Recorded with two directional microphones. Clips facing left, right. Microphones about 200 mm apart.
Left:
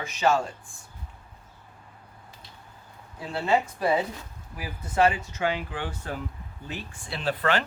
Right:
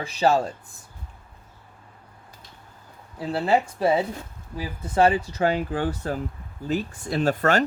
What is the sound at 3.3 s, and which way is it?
Speech, 35° right (ahead or behind).